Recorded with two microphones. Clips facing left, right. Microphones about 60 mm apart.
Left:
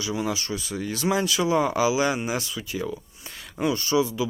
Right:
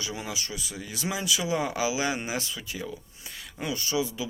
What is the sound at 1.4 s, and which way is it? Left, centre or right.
Speech, left.